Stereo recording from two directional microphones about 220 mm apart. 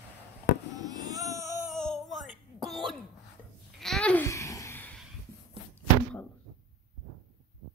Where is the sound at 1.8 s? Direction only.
Centre (ahead or behind).